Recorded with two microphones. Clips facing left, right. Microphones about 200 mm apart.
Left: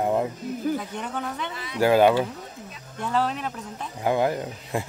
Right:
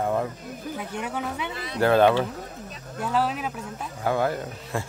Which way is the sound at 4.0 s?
15° left (ahead or behind).